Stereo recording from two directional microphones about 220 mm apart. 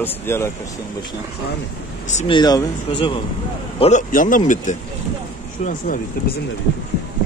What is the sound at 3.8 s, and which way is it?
Speech, 35° left (ahead or behind).